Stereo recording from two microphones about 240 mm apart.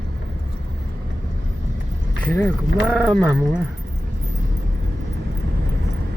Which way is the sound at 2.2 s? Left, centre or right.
Centre.